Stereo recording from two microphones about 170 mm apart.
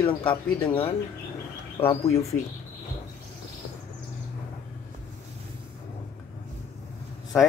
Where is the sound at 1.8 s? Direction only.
35° left (ahead or behind).